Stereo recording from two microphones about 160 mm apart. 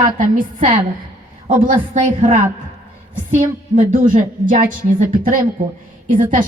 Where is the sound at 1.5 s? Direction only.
60° right (ahead or behind).